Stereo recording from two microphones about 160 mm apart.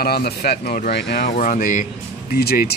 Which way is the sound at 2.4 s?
75° left (ahead or behind).